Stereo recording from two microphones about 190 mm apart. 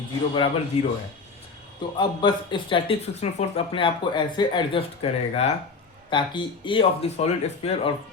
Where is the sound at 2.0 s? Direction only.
25° left (ahead or behind).